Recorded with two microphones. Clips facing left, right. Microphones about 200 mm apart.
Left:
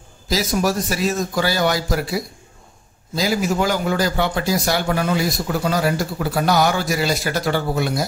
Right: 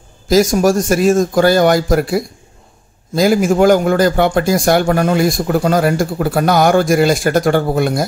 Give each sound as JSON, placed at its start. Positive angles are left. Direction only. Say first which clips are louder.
{"t": 0.3, "sound": "a man's voice", "louder": "right 9 dB", "side_deg": -50}